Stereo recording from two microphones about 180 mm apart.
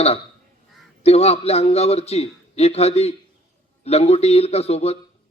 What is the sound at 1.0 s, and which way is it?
A man's voice, 35° left (ahead or behind).